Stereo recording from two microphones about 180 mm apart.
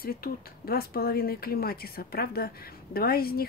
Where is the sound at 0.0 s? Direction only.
55° left (ahead or behind).